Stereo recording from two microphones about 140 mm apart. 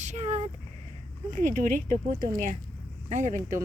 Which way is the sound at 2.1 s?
80° right.